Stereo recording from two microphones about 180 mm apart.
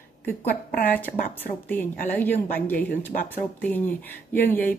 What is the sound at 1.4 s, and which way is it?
A woman's voice, 10° left (ahead or behind).